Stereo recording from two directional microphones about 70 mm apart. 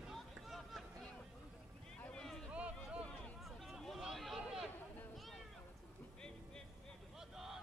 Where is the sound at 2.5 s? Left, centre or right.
Centre.